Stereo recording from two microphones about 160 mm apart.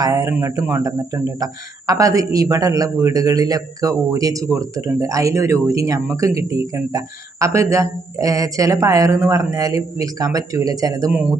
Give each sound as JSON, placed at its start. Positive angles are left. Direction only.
{"t": 0.0, "sound": "speech", "side_deg": -20}